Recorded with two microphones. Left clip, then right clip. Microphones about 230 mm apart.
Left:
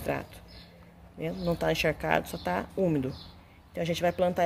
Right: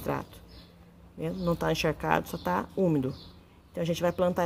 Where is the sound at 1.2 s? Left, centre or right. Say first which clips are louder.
Even; right.